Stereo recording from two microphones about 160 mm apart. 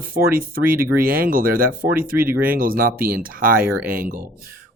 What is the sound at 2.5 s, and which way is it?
Speech, 65° right (ahead or behind).